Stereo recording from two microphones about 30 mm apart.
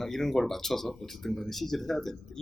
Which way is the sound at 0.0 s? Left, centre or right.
Centre.